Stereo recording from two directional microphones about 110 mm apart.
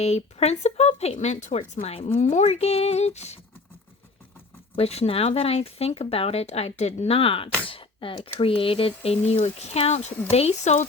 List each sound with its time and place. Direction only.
0.0 s speech: 70° left (ahead or behind)
4.7 s speech: 65° left (ahead or behind); by 10.8 s 90° left